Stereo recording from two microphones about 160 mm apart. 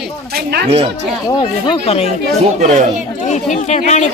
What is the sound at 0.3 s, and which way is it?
Speech, 90° right.